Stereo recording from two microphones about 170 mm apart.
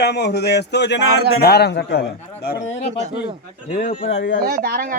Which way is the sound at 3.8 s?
40° left (ahead or behind).